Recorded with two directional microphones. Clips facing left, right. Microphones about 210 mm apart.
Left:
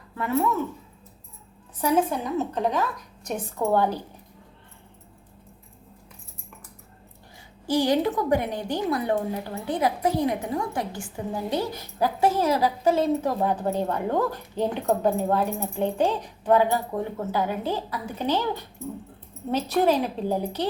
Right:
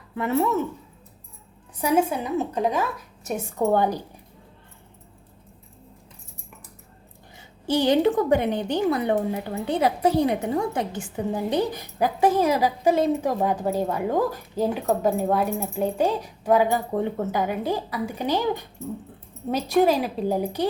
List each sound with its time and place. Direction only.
1.8 s a woman's voice: 10° right (ahead or behind)
7.7 s a woman's voice: 25° right (ahead or behind)